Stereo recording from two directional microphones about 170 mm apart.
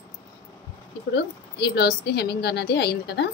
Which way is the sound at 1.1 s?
75° left (ahead or behind).